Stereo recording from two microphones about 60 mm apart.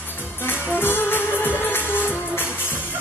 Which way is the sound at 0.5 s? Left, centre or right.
Left.